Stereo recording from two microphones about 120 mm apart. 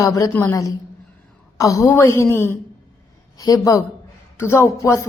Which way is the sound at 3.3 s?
30° left (ahead or behind).